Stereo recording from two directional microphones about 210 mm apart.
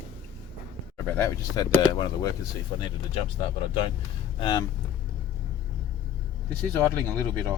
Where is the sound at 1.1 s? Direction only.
15° left (ahead or behind).